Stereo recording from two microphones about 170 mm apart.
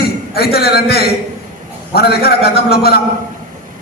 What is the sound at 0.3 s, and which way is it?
A man's voice, 65° left (ahead or behind).